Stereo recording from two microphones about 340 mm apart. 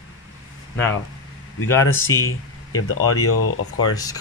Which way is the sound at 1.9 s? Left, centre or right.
Left.